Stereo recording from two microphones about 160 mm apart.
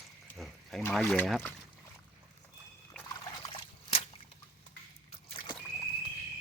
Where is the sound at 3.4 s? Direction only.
35° left (ahead or behind).